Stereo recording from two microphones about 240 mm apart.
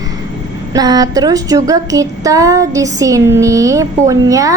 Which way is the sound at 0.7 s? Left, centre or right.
Centre.